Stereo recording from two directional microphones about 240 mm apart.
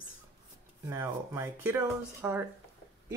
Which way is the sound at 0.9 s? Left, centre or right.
Centre.